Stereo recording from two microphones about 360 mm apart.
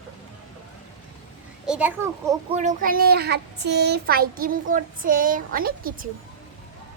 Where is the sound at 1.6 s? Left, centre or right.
Centre; by 6.1 s right.